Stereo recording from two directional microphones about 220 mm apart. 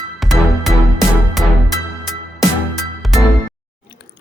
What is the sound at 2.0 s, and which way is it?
Music, centre (ahead or behind).